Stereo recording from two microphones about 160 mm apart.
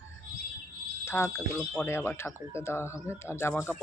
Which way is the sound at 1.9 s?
15° left (ahead or behind).